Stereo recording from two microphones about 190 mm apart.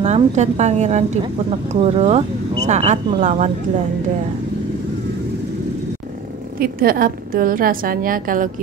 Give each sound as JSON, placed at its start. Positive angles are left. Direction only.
{"t": 0.0, "sound": "speech", "side_deg": -35}
{"t": 6.6, "sound": "a woman's voice", "side_deg": -50}